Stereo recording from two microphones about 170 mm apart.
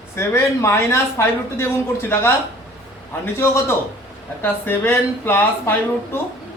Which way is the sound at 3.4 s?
15° left (ahead or behind).